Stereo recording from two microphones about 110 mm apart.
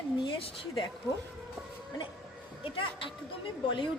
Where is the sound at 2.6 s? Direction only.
50° left (ahead or behind).